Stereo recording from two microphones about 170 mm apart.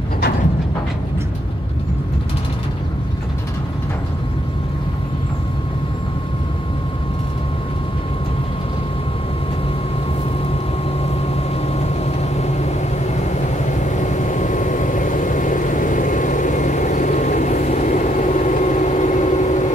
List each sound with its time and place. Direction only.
11.7 s vehicle: 40° left (ahead or behind)
13.7 s vehicle: 45° left (ahead or behind)